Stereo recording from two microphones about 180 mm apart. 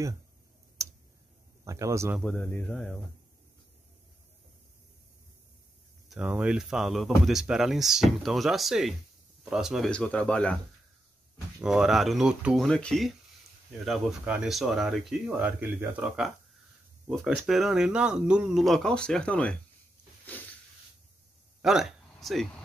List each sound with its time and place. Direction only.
0.8 s tick-tock: 15° right (ahead or behind)
1.6 s speech: 15° right (ahead or behind)
2.1 s speech: 5° left (ahead or behind)
6.0 s speech: 5° right (ahead or behind)
11.6 s speech: 5° right (ahead or behind)
21.5 s a sound: centre (ahead or behind)